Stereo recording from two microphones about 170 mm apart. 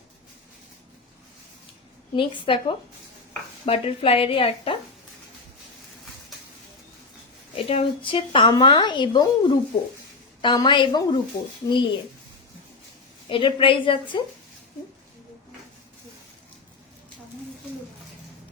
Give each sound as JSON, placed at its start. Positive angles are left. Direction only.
{"t": 2.1, "sound": "speech", "side_deg": 30}
{"t": 7.5, "sound": "speech", "side_deg": 35}
{"t": 13.3, "sound": "speech", "side_deg": 30}